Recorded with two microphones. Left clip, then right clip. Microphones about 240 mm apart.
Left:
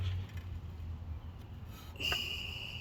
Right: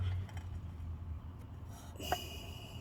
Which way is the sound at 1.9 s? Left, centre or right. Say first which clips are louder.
Left 5 dB; centre.